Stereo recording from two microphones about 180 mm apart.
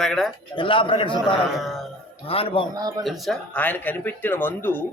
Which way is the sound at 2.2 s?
30° left (ahead or behind).